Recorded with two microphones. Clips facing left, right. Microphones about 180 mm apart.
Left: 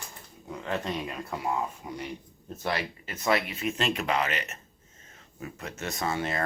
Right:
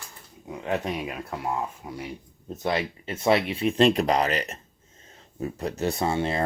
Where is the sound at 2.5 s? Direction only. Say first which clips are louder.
Right 4 dB; 20° right (ahead or behind).